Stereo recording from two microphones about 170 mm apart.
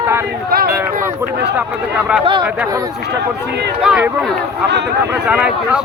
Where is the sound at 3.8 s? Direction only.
5° right (ahead or behind).